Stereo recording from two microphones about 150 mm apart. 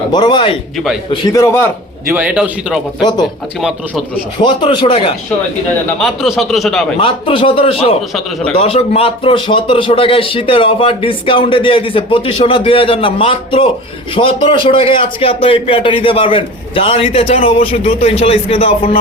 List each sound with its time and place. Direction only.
0.1 s speech: 30° left (ahead or behind)
2.1 s a man's voice: 10° right (ahead or behind)
3.0 s speech: 30° left (ahead or behind)
4.4 s speech: 30° left (ahead or behind)
6.0 s speech: centre (ahead or behind)
7.0 s speech: 35° left (ahead or behind)